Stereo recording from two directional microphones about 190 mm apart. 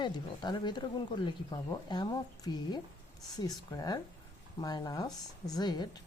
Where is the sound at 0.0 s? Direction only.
25° left (ahead or behind).